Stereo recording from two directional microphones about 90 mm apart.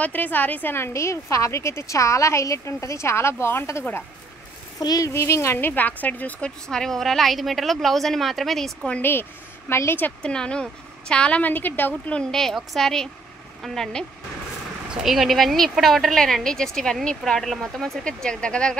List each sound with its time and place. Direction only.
0.0 s a woman's voice: 20° left (ahead or behind)
4.7 s speech: 45° left (ahead or behind)
5.1 s speech: 30° left (ahead or behind)
6.7 s a woman's voice: 5° left (ahead or behind)
8.8 s a woman's voice: 15° left (ahead or behind)
9.7 s speech: 30° left (ahead or behind)
10.2 s a woman's voice: 10° left (ahead or behind)
12.1 s a woman's voice: 10° left (ahead or behind)